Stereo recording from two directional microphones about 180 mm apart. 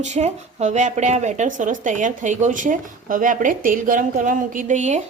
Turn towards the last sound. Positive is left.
turn(degrees=-40)  # may be behind; listen again after turning